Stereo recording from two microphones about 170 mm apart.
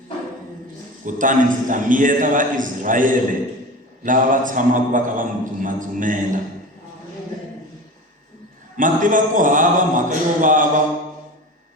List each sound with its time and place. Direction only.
1.0 s a man's voice: 50° right (ahead or behind)
8.7 s a man's voice: 50° right (ahead or behind)